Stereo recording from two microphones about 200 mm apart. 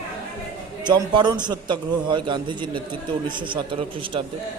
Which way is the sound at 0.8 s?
20° right (ahead or behind).